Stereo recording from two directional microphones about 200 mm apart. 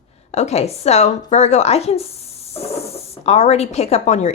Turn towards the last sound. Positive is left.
turn(degrees=35)  # may be behind; listen again after turning